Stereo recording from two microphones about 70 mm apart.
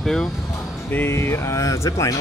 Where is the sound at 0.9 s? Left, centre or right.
Left.